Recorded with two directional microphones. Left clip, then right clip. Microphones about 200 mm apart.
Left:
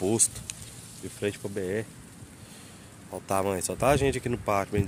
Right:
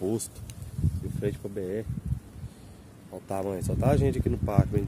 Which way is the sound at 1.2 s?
5° left (ahead or behind).